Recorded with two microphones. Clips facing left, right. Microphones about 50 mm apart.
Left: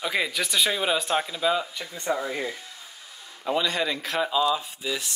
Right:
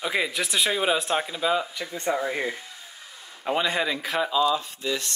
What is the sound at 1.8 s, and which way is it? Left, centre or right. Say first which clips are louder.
Speech: right 2 dB; right.